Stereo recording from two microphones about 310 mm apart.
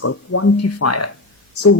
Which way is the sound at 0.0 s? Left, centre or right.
Left.